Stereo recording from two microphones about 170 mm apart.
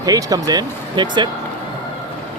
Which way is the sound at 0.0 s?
20° right (ahead or behind).